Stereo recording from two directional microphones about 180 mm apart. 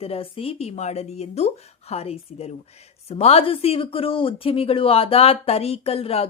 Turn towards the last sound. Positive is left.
turn(degrees=35)  # may be behind; listen again after turning